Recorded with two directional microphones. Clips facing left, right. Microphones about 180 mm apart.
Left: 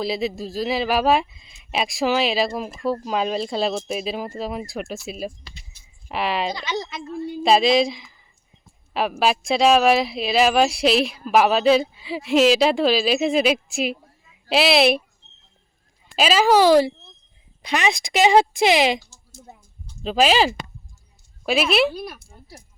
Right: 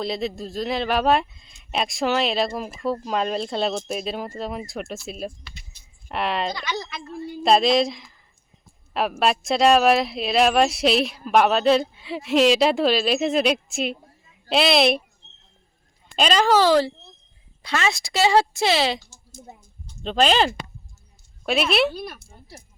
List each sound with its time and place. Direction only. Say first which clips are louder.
0.0 s speech: left 2 dB; 5° left (ahead or behind)
6.6 s speech: left 2 dB; 25° left (ahead or behind)
7.4 s speech: left 1 dB; centre (ahead or behind)
16.1 s speech: left 2 dB; 5° left (ahead or behind)